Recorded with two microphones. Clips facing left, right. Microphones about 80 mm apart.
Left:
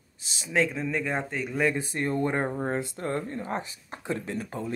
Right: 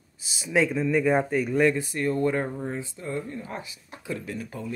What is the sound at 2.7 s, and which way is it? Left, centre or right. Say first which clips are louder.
Speech: left 2 dB; left.